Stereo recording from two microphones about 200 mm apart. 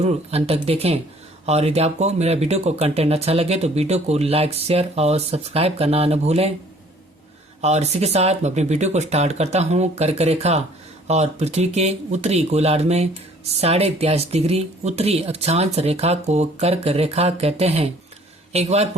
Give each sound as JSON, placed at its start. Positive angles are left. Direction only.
{"t": 0.0, "sound": "speech", "side_deg": -30}
{"t": 7.6, "sound": "speech", "side_deg": -35}